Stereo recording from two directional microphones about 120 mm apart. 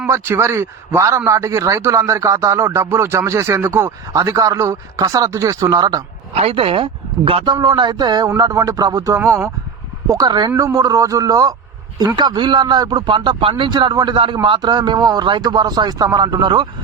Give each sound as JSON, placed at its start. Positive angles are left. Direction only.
{"t": 0.1, "sound": "a man's voice", "side_deg": -20}
{"t": 6.3, "sound": "a man's voice", "side_deg": -55}